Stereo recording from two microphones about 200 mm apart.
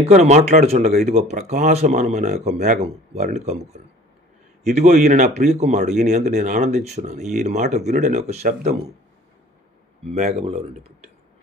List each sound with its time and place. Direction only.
0.1 s speech: 35° right (ahead or behind)
10.1 s speech: 35° right (ahead or behind)